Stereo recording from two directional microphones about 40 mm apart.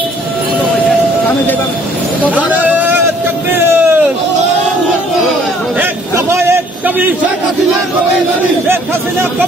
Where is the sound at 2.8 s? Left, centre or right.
Right.